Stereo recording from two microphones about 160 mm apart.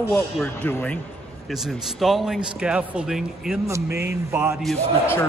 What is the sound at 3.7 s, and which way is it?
Speech, 20° right (ahead or behind).